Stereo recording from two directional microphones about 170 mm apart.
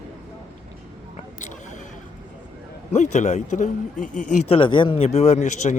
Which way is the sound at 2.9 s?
45° left (ahead or behind).